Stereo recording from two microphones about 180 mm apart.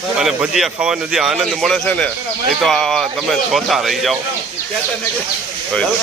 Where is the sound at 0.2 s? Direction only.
5° right (ahead or behind).